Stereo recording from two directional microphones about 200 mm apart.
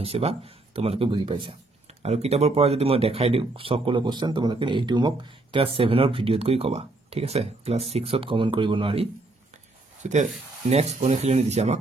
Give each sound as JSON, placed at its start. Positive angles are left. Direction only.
{"t": 0.0, "sound": "speech", "side_deg": -30}